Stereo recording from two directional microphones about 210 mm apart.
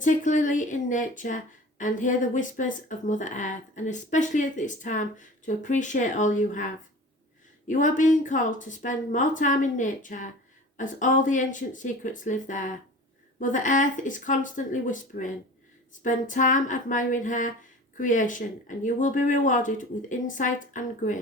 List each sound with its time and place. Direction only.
0.0 s speech: 35° left (ahead or behind)
7.7 s speech: 40° left (ahead or behind)